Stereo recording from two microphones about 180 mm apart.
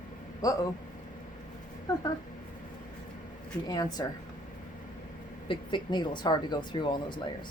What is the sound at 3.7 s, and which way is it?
Speech, 20° left (ahead or behind).